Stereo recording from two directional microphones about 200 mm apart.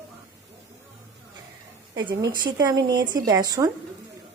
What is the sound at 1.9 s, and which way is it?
A woman's voice, 20° right (ahead or behind).